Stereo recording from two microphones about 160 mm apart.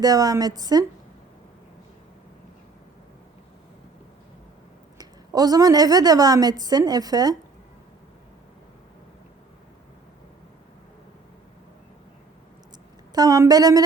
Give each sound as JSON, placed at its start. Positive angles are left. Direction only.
{"t": 0.0, "sound": "a woman's voice", "side_deg": -25}
{"t": 4.9, "sound": "a woman's voice", "side_deg": -25}
{"t": 13.1, "sound": "a woman's voice", "side_deg": -25}